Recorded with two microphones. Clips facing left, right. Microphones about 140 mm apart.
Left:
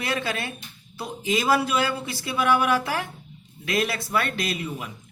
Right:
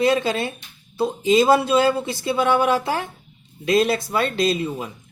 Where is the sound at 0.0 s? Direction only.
25° right (ahead or behind).